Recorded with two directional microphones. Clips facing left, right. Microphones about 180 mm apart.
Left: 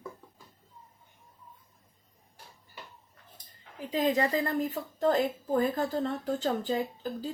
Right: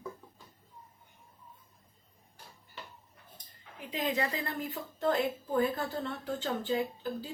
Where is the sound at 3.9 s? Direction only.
40° left (ahead or behind).